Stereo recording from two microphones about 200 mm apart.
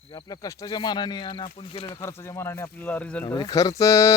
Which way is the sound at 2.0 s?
15° left (ahead or behind).